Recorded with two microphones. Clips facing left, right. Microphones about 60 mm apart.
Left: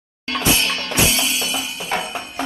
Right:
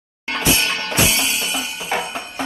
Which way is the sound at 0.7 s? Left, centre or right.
Right.